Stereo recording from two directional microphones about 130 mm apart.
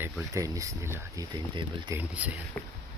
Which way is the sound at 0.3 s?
25° right (ahead or behind).